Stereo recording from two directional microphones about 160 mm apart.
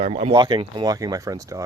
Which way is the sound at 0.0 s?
35° right (ahead or behind).